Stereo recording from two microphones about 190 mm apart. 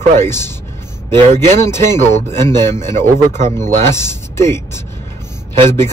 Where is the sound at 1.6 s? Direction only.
15° left (ahead or behind).